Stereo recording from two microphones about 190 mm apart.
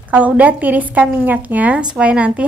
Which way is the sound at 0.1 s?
10° right (ahead or behind).